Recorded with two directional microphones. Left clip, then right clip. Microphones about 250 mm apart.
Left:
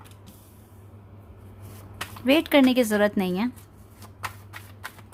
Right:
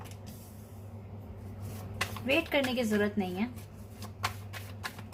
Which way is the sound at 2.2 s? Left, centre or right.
Left.